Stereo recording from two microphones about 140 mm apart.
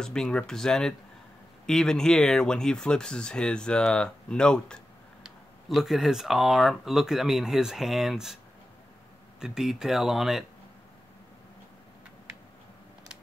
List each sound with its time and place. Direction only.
0.0 s speech: 5° left (ahead or behind)
9.4 s speech: 5° right (ahead or behind)